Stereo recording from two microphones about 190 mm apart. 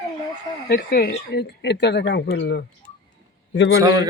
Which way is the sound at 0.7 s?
55° left (ahead or behind).